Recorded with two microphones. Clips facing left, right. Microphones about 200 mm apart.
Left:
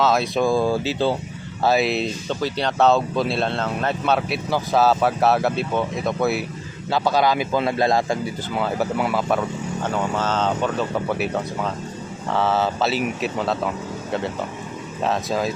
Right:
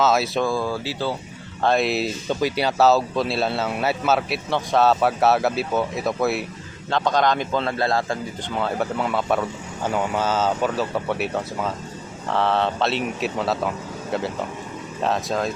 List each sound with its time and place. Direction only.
0.0 s speech: centre (ahead or behind)
0.4 s speech: 25° left (ahead or behind)
1.6 s a man's voice: 5° left (ahead or behind)
15.0 s speech: centre (ahead or behind)